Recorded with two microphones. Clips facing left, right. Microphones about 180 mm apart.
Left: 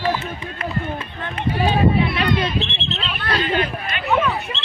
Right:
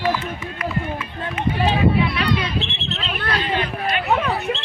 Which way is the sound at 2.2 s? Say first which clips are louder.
Left 2 dB; 50° left (ahead or behind).